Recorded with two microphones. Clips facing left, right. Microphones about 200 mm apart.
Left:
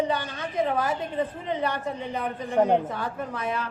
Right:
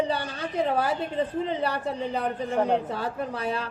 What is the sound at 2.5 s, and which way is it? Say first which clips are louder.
Speech: left 3 dB; 10° left (ahead or behind).